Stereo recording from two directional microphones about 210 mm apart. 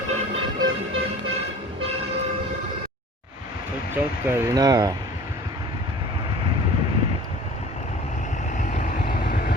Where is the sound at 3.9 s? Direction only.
10° right (ahead or behind).